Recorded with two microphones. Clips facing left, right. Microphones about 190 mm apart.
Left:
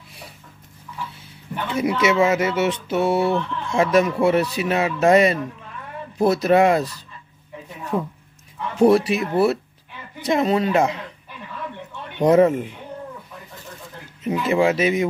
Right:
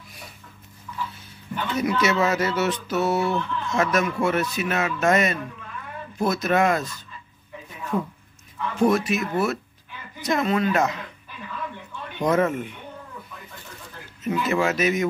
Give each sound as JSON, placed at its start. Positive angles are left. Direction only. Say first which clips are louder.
{"t": 1.8, "sound": "a man's voice", "louder": "left 4 dB", "side_deg": 25}
{"t": 12.2, "sound": "a man's voice", "louder": "left 7 dB", "side_deg": 30}
{"t": 14.4, "sound": "speech", "louder": "left 4 dB", "side_deg": 30}